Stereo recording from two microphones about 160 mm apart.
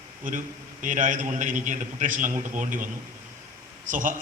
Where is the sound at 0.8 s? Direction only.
55° right (ahead or behind).